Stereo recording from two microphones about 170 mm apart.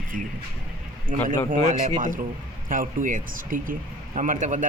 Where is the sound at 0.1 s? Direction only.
55° right (ahead or behind).